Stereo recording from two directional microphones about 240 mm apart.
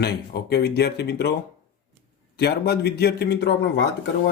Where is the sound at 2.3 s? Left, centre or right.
Left.